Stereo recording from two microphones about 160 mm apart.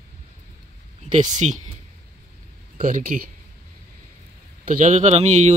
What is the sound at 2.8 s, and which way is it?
Speech, 60° right (ahead or behind).